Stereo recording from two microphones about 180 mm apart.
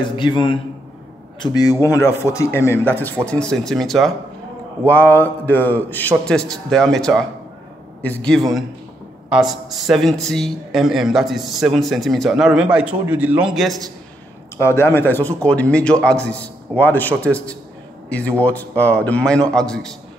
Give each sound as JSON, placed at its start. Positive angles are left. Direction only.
{"t": 0.0, "sound": "a man's voice", "side_deg": 25}
{"t": 14.6, "sound": "a man's voice", "side_deg": 15}